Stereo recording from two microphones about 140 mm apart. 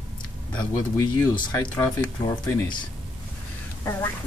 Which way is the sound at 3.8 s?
15° left (ahead or behind).